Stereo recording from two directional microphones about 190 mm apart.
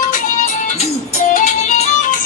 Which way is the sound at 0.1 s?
40° left (ahead or behind).